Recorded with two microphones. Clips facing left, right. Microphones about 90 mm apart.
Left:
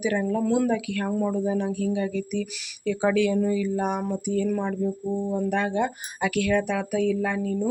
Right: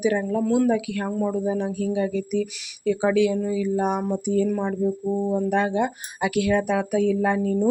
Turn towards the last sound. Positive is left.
turn(degrees=-30)  # may be behind; listen again after turning